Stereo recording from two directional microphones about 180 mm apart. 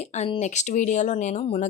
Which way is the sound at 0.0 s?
40° left (ahead or behind).